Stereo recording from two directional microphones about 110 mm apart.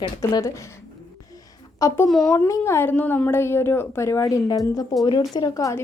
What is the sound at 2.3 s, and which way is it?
A woman's voice, 25° left (ahead or behind).